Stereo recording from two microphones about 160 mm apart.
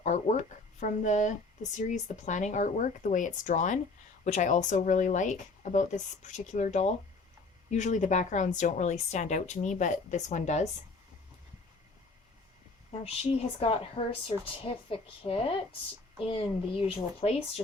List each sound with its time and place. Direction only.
0.0 s speech: 50° left (ahead or behind)
13.6 s speech: 35° left (ahead or behind)